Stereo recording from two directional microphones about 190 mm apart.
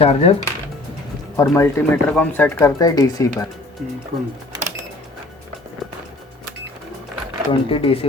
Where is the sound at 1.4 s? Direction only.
15° left (ahead or behind).